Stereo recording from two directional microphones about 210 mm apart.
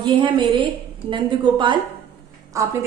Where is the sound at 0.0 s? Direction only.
25° right (ahead or behind).